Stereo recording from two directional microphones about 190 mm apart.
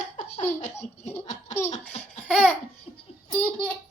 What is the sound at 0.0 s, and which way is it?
Laughter, 40° left (ahead or behind).